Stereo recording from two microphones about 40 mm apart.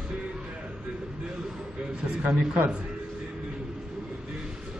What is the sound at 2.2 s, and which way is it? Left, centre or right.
Speech, centre.